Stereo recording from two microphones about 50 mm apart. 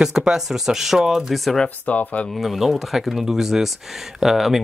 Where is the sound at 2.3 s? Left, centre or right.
Centre.